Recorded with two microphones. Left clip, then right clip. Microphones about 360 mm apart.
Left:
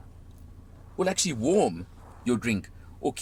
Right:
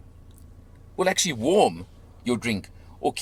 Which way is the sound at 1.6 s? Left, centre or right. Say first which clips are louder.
Right 5 dB; right.